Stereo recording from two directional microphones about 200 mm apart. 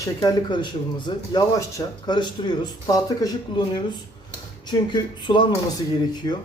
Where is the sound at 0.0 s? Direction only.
20° left (ahead or behind).